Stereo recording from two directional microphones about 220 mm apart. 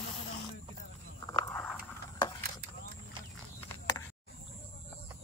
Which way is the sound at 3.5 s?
15° left (ahead or behind).